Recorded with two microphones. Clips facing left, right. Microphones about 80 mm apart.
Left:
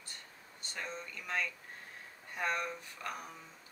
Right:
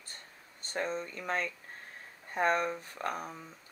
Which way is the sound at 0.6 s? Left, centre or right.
Right.